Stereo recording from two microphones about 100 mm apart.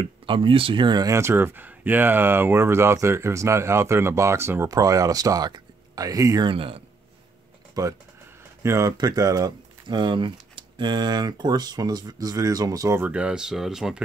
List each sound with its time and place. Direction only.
0.0 s speech: 60° right (ahead or behind); by 1.1 s 45° right (ahead or behind)
1.1 s speech: 25° right (ahead or behind)
6.4 s speech: 65° right (ahead or behind)
7.8 s speech: 40° right (ahead or behind)
13.0 s speech: 10° right (ahead or behind)